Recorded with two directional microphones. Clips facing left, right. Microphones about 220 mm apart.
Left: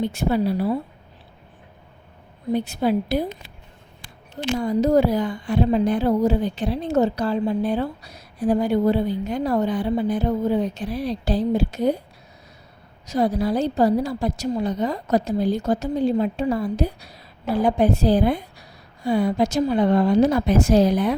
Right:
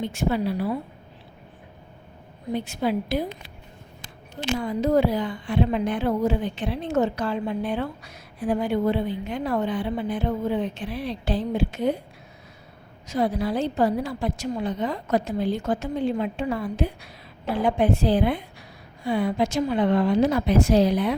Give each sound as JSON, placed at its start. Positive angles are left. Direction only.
{"t": 0.0, "sound": "a woman's voice", "side_deg": 35}
{"t": 2.6, "sound": "a woman's voice", "side_deg": 35}
{"t": 4.5, "sound": "a woman's voice", "side_deg": 40}
{"t": 13.1, "sound": "a woman's voice", "side_deg": 40}